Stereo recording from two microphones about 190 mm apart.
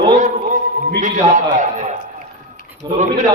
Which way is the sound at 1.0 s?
40° right (ahead or behind).